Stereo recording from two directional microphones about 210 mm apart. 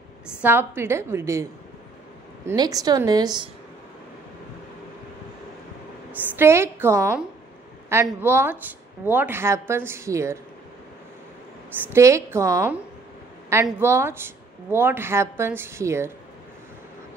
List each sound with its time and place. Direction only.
0.4 s speech: 10° right (ahead or behind)
6.3 s speech: 10° right (ahead or behind)
11.7 s speech: 15° right (ahead or behind)